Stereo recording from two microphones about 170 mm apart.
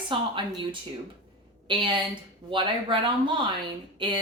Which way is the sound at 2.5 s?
30° right (ahead or behind).